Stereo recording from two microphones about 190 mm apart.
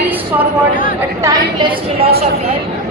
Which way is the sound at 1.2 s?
20° right (ahead or behind).